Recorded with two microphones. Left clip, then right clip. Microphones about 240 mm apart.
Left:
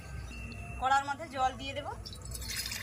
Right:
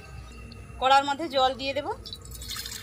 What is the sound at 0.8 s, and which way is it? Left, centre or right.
A man's voice, right.